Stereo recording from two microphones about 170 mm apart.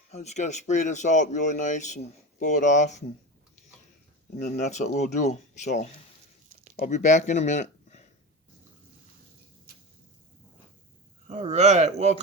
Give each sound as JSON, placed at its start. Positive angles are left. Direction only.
{"t": 0.1, "sound": "speech", "side_deg": 40}
{"t": 4.4, "sound": "speech", "side_deg": 45}
{"t": 11.3, "sound": "speech", "side_deg": -40}